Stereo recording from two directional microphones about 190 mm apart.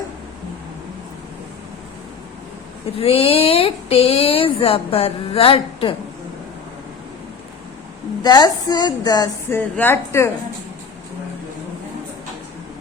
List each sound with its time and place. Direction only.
3.0 s speech: 30° left (ahead or behind)
8.2 s speech: 20° left (ahead or behind)
9.6 s a woman's voice: 10° left (ahead or behind)